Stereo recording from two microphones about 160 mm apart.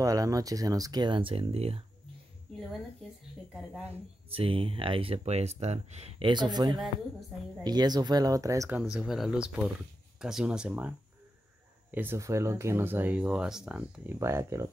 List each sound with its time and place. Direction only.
0.0 s speech: 20° right (ahead or behind); by 1.8 s 40° right (ahead or behind)
3.5 s speech: 5° right (ahead or behind)
4.3 s speech: 35° right (ahead or behind); by 8.7 s 20° right (ahead or behind)
8.9 s speech: centre (ahead or behind)
14.1 s speech: 15° right (ahead or behind)